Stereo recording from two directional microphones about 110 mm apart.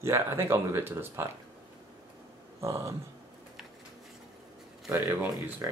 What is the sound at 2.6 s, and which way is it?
Speech, 25° right (ahead or behind).